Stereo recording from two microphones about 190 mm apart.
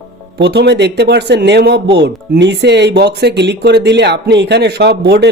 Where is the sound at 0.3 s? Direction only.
60° right (ahead or behind).